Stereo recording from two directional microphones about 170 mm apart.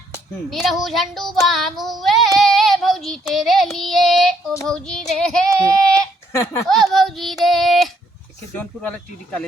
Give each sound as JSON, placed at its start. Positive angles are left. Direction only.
{"t": 0.5, "sound": "child singing", "side_deg": 0}
{"t": 4.6, "sound": "speech", "side_deg": 5}
{"t": 6.7, "sound": "child singing", "side_deg": 0}
{"t": 8.5, "sound": "speech", "side_deg": 10}